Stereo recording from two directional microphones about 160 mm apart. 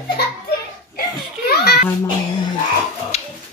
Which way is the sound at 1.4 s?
80° left.